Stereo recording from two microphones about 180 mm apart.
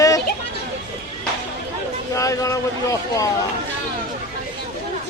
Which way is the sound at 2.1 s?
15° left (ahead or behind).